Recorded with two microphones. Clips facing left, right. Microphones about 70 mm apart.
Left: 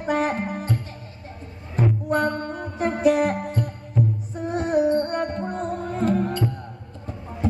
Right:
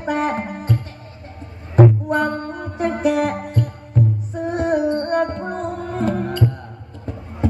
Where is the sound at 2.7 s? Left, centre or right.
Right.